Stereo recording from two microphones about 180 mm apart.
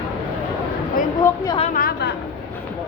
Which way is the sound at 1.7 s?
55° left (ahead or behind).